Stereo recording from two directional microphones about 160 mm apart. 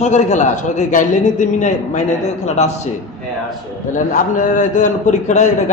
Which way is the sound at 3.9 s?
50° left (ahead or behind).